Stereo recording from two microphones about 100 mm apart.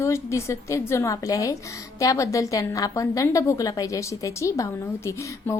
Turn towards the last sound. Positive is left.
turn(degrees=30)  # may be behind; listen again after turning